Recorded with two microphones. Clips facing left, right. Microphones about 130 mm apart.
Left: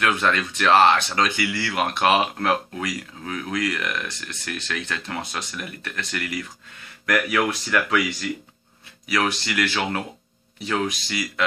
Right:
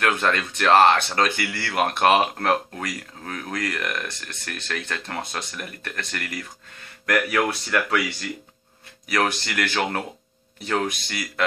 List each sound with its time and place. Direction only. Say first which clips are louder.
0.0 s speech: even; 45° right (ahead or behind)
9.1 s speech: even; 45° right (ahead or behind)